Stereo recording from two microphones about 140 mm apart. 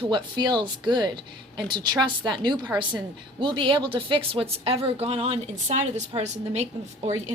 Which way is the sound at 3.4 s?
35° right (ahead or behind).